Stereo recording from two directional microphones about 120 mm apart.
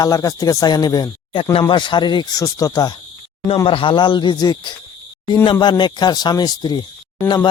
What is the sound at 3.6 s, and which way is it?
Speech, 45° left (ahead or behind).